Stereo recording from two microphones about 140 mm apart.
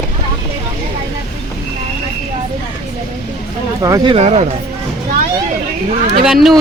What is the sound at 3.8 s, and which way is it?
Speech, 25° right (ahead or behind).